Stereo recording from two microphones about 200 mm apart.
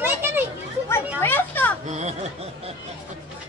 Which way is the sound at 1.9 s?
35° right (ahead or behind).